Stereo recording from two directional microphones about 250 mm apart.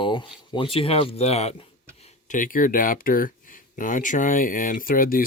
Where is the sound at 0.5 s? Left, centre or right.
Left.